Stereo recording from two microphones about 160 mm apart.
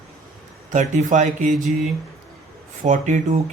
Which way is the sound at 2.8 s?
50° right (ahead or behind).